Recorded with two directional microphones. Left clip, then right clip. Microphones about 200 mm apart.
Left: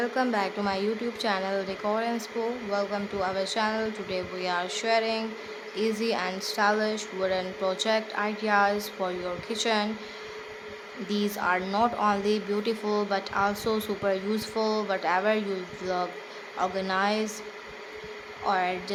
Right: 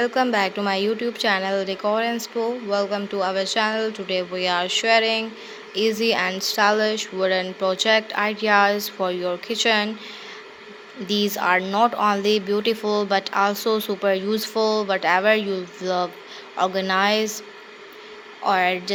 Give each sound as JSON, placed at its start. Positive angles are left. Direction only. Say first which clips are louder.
{"t": 0.0, "sound": "speech", "louder": "right 7 dB", "side_deg": -20}
{"t": 11.1, "sound": "speech", "louder": "right 7 dB", "side_deg": -20}
{"t": 18.4, "sound": "speech", "louder": "right 7 dB", "side_deg": -20}